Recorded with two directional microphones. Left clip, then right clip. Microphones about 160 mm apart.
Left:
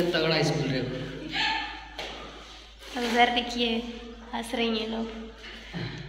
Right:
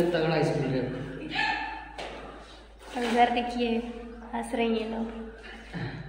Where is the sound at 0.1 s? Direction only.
40° right (ahead or behind).